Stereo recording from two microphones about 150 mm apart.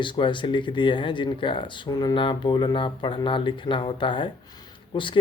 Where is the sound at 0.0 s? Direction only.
35° left (ahead or behind).